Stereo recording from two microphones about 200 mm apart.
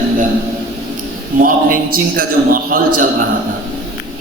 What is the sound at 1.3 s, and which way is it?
Speech, 45° right (ahead or behind).